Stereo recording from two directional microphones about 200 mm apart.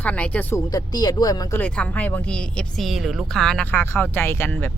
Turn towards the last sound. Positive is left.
turn(degrees=10)  # may be behind; listen again after turning